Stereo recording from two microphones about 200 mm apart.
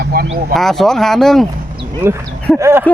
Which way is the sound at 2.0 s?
10° right (ahead or behind).